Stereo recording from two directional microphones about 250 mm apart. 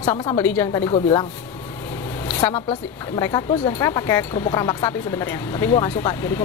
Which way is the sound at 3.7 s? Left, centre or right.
Centre.